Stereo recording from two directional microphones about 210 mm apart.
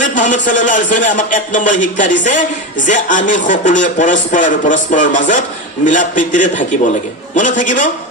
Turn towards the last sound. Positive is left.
turn(degrees=40)  # may be behind; listen again after turning